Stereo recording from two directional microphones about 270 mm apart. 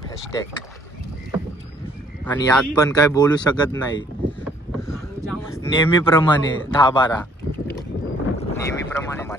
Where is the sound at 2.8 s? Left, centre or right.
Centre.